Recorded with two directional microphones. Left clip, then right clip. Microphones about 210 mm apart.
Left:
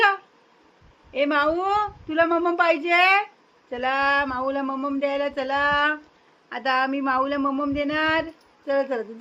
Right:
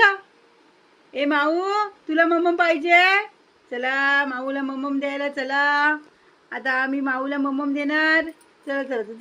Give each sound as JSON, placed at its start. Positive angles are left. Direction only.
{"t": 1.1, "sound": "speech", "side_deg": 5}